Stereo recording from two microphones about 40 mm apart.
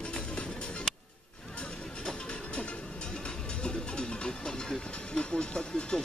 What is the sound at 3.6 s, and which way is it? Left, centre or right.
Music, left.